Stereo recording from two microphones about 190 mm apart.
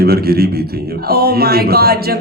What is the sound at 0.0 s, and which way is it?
A man's voice, 55° right (ahead or behind).